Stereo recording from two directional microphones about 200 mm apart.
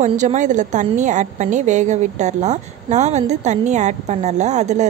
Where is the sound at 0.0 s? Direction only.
35° right (ahead or behind).